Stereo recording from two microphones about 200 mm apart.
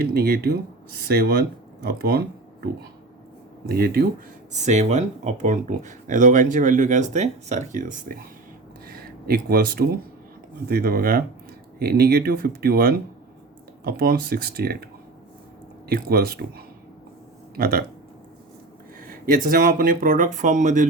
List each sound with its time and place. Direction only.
0.0 s speech: 50° right (ahead or behind)
3.7 s speech: 50° right (ahead or behind)
4.5 s speech: 35° right (ahead or behind)
15.9 s speech: 50° right (ahead or behind)
18.9 s speech: 45° right (ahead or behind)